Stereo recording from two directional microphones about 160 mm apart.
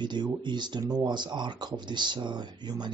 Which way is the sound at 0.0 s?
30° right (ahead or behind).